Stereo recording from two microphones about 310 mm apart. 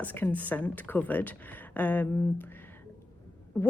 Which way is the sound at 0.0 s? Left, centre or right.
Centre.